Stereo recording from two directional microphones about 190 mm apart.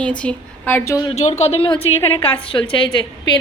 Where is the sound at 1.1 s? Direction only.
35° left (ahead or behind).